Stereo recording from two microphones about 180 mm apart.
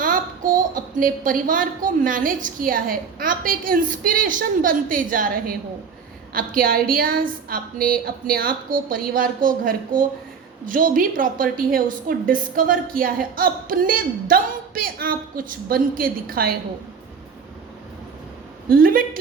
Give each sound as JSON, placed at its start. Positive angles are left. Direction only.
{"t": 0.0, "sound": "a woman's voice", "side_deg": -50}
{"t": 18.7, "sound": "a woman's voice", "side_deg": -55}